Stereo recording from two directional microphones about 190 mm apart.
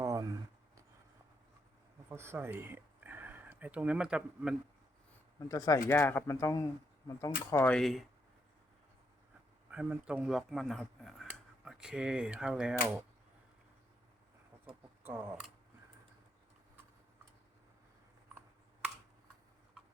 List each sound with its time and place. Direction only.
0.0 s a sound: 15° right (ahead or behind)
2.0 s speech: 15° right (ahead or behind)
5.5 s speech: 20° left (ahead or behind); by 8.0 s centre (ahead or behind)
9.6 s speech: 5° right (ahead or behind)
15.0 s speech: 10° right (ahead or behind)